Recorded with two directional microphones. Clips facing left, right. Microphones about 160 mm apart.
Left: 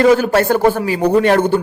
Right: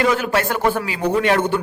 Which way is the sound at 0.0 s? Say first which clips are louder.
Left 7 dB; 35° left (ahead or behind).